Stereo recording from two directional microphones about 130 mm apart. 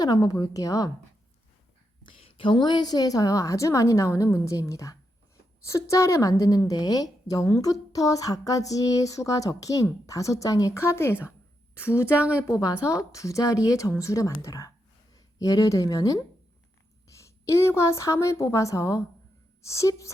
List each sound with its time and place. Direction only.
0.0 s a woman's voice: 30° left (ahead or behind)
2.0 s a woman's voice: 40° left (ahead or behind); by 12.1 s 20° left (ahead or behind)
12.1 s a woman's voice: 10° right (ahead or behind)
12.5 s a woman's voice: 25° left (ahead or behind)